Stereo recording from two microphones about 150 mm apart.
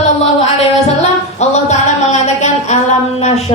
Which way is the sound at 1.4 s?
50° left (ahead or behind).